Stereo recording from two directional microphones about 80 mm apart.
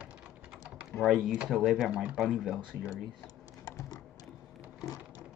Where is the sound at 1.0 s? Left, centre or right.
Centre.